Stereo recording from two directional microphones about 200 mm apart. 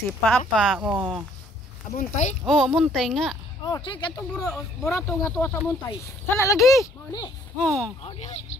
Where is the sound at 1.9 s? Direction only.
35° left (ahead or behind).